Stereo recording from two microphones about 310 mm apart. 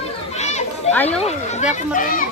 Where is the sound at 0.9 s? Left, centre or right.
Centre.